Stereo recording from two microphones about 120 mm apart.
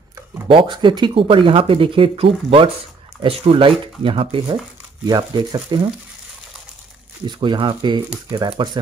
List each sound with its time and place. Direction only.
0.5 s speech: 45° right (ahead or behind)
7.2 s speech: 40° right (ahead or behind)